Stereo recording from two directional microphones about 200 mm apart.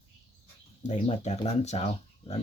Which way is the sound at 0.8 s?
35° left (ahead or behind).